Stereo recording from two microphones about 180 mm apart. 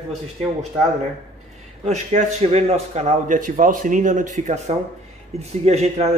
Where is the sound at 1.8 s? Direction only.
40° right (ahead or behind).